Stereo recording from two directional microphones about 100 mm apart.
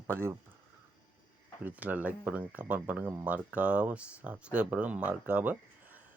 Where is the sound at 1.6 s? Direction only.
15° right (ahead or behind).